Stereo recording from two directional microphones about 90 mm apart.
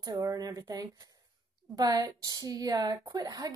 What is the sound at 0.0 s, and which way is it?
A woman's voice, 40° right (ahead or behind).